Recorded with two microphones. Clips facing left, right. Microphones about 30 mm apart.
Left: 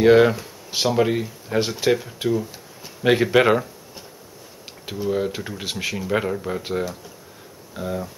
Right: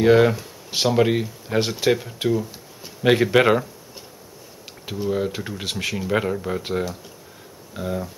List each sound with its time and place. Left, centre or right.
0.0 s speech: centre
0.7 s speech: centre